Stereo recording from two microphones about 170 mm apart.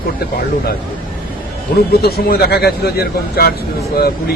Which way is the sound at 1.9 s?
65° left (ahead or behind).